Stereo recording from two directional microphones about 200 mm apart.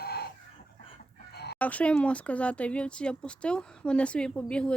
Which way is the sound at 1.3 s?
55° left (ahead or behind).